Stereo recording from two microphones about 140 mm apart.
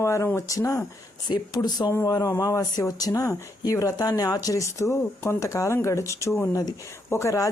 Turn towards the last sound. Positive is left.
turn(degrees=20)  # may be behind; listen again after turning